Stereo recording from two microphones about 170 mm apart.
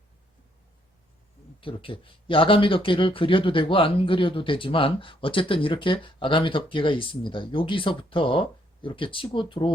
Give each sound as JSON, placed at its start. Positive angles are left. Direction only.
{"t": 1.6, "sound": "speech", "side_deg": 30}